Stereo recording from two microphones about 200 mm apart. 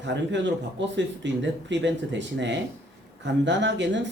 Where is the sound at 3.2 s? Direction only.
65° right (ahead or behind).